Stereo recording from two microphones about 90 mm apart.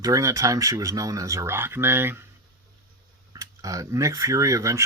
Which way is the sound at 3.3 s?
40° right (ahead or behind).